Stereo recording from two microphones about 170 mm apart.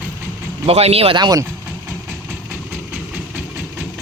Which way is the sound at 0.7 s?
35° right (ahead or behind).